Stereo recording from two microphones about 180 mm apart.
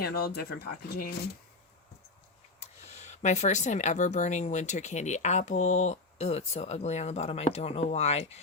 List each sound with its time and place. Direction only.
0.0 s speech: 60° left (ahead or behind)
2.6 s speech: 40° left (ahead or behind)